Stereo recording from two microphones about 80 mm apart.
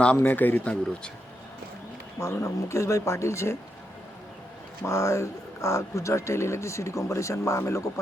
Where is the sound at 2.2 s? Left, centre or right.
Left.